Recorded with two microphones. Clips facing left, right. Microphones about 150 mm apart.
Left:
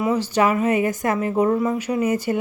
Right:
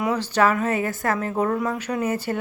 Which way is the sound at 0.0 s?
10° left (ahead or behind).